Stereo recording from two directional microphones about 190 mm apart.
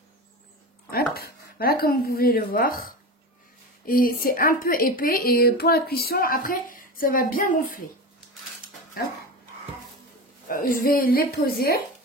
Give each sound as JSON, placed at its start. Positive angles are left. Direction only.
{"t": 0.8, "sound": "speech", "side_deg": 55}
{"t": 10.5, "sound": "speech", "side_deg": 45}